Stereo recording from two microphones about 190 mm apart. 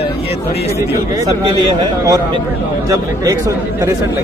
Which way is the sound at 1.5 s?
20° right (ahead or behind).